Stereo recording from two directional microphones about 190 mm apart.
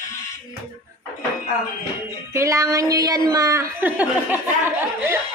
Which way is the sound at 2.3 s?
15° right (ahead or behind).